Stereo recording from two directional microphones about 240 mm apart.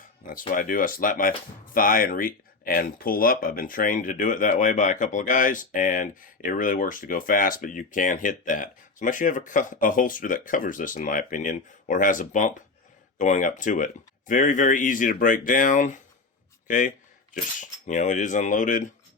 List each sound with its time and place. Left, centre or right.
0.3 s speech: left